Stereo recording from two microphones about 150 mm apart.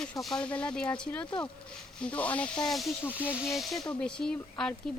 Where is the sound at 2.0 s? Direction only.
10° left (ahead or behind).